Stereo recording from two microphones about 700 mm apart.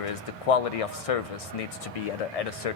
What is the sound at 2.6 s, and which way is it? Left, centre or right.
Speech, left.